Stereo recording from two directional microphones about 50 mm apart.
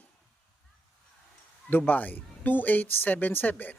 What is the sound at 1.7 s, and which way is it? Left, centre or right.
Speech, left.